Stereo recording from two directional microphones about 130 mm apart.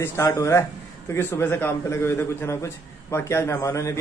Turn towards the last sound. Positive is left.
turn(degrees=25)  # may be behind; listen again after turning